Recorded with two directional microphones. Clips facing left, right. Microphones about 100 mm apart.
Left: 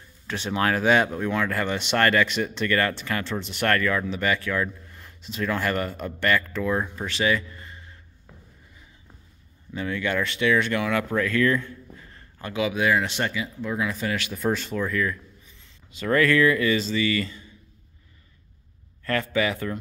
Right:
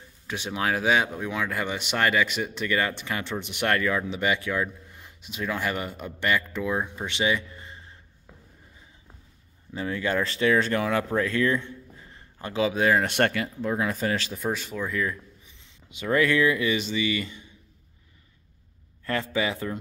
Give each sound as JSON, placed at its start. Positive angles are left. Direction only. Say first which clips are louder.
{"t": 0.3, "sound": "speech", "louder": "left 3 dB", "side_deg": -5}
{"t": 9.8, "sound": "speech", "louder": "even", "side_deg": -30}
{"t": 13.1, "sound": "speech", "louder": "right 4 dB", "side_deg": -60}
{"t": 13.6, "sound": "speech", "louder": "right 1 dB", "side_deg": -40}
{"t": 14.4, "sound": "speech", "louder": "left 4 dB", "side_deg": -5}
{"t": 14.9, "sound": "speech", "louder": "left 2 dB", "side_deg": -20}
{"t": 19.0, "sound": "a man's voice", "louder": "left 2 dB", "side_deg": -20}